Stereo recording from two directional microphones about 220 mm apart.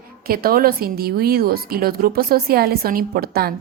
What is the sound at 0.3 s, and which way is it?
A woman's voice, 40° right (ahead or behind).